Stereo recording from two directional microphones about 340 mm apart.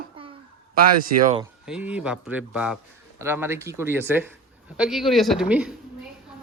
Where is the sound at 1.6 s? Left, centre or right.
Centre.